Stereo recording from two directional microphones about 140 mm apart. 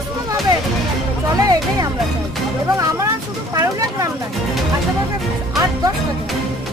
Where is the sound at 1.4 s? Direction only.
25° right (ahead or behind).